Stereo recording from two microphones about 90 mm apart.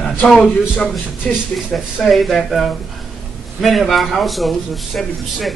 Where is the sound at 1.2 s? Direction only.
5° left (ahead or behind).